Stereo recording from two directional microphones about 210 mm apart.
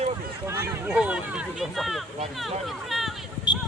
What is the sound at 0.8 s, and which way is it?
Speech, 5° right (ahead or behind).